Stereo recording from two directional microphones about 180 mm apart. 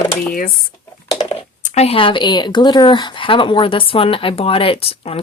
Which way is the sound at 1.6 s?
35° left (ahead or behind).